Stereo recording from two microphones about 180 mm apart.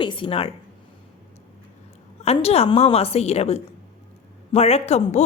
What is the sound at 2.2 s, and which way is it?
A woman's voice, 35° left (ahead or behind).